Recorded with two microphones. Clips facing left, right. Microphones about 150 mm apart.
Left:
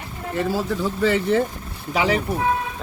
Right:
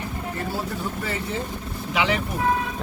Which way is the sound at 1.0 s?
90° left.